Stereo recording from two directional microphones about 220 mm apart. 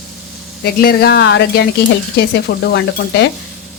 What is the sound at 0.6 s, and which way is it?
A woman's voice, 45° left (ahead or behind).